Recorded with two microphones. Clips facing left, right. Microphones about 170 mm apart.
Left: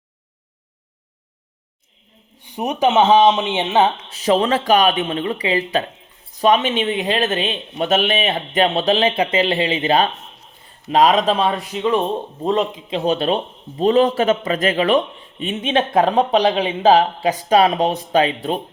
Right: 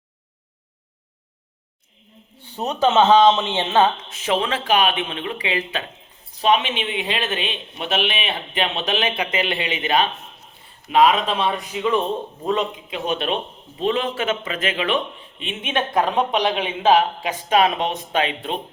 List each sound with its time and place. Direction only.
2.4 s speech: 15° left (ahead or behind)
4.1 s speech: 35° left (ahead or behind)